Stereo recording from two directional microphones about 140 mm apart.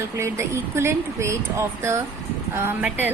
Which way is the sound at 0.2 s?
20° right (ahead or behind).